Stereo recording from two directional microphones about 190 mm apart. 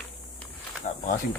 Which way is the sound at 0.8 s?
45° left (ahead or behind).